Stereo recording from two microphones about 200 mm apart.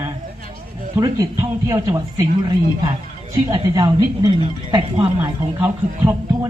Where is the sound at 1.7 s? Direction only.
15° right (ahead or behind).